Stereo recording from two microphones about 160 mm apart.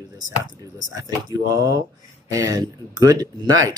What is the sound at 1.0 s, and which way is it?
Speech, 20° right (ahead or behind).